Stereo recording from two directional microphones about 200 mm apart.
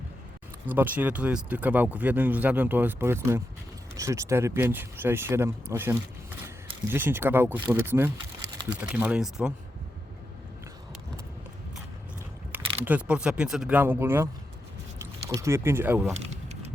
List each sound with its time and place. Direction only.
0.7 s speech: 10° right (ahead or behind)
12.5 s speech: 10° right (ahead or behind)
16.2 s a sound: 35° right (ahead or behind)